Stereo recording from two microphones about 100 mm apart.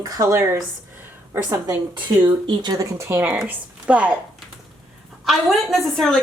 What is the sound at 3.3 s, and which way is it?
Speech, 10° right (ahead or behind).